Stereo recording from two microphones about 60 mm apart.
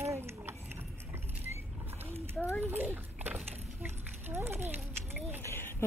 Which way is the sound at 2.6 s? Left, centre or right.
Right.